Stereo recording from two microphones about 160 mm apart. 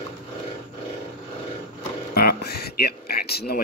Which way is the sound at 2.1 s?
75° left (ahead or behind).